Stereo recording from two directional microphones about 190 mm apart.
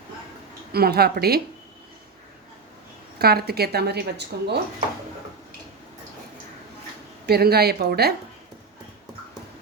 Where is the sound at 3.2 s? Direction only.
55° right (ahead or behind).